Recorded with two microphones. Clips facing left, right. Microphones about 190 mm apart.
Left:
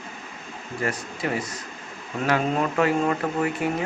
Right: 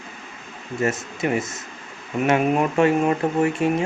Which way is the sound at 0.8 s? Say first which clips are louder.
Right 5 dB; 25° right (ahead or behind).